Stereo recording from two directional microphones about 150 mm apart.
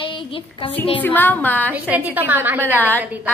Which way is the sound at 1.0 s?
10° left (ahead or behind).